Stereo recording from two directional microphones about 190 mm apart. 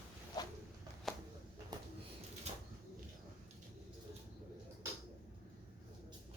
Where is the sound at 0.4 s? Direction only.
20° left (ahead or behind).